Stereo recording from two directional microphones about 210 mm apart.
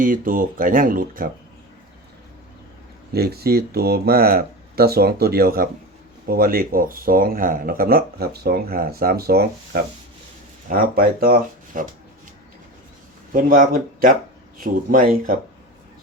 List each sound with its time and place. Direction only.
0.0 s speech: 40° right (ahead or behind)
3.1 s speech: 50° right (ahead or behind)
13.3 s speech: 40° right (ahead or behind)